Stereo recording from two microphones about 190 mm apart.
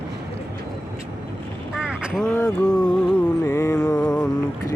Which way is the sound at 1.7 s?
5° right (ahead or behind).